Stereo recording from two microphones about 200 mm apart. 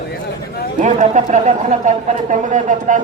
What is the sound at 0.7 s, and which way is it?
Speech, 40° right (ahead or behind).